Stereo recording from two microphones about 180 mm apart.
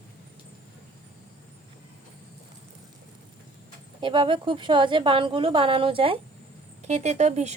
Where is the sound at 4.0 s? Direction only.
30° right (ahead or behind).